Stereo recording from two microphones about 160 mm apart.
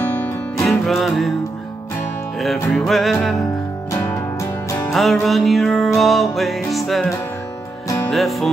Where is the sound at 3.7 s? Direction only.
20° left (ahead or behind).